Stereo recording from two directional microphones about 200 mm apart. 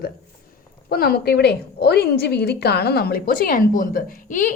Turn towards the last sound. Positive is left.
turn(degrees=40)  # may be behind; listen again after turning